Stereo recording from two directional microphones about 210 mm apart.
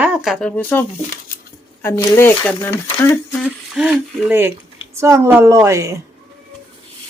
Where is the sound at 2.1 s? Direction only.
10° left (ahead or behind).